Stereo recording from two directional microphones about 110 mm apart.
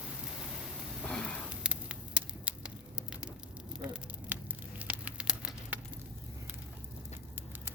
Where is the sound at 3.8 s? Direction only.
10° right (ahead or behind).